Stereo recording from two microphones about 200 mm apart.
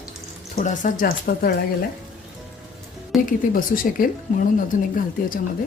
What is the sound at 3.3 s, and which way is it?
Speech, 45° left (ahead or behind).